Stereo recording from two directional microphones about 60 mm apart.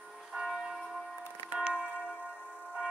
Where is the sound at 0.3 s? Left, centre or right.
Centre.